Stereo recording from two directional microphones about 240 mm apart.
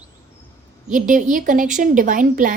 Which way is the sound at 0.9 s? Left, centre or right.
Right.